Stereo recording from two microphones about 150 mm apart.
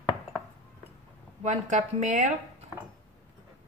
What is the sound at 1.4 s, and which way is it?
Speech, 50° right (ahead or behind).